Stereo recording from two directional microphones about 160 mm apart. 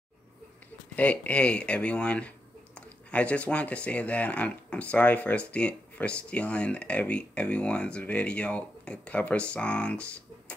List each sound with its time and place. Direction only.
0.9 s speech: 10° left (ahead or behind)